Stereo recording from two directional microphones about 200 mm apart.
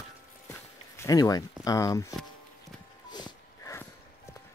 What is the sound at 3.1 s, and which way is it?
Music, 20° left (ahead or behind).